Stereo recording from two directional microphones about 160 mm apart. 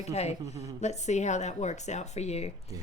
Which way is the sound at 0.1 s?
40° left (ahead or behind).